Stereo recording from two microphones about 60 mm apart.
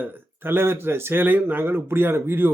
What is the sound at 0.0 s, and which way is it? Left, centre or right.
Speech, right.